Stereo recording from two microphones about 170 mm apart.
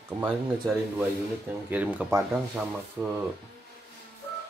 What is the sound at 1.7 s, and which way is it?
Speech, 10° right (ahead or behind).